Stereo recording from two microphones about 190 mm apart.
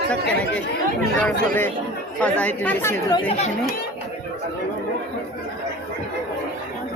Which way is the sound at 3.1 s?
30° left (ahead or behind).